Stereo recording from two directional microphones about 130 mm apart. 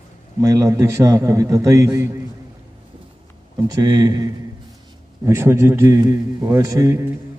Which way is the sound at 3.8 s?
30° right (ahead or behind).